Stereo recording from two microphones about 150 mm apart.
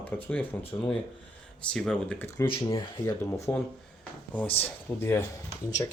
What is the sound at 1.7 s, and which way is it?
Speech, 5° left (ahead or behind).